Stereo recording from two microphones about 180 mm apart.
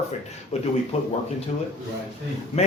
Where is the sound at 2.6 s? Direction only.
35° left (ahead or behind).